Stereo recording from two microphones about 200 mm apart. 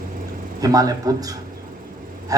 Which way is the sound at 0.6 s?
20° right (ahead or behind).